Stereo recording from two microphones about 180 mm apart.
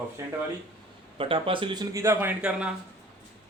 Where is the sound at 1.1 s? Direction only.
30° right (ahead or behind); by 2.7 s 10° right (ahead or behind).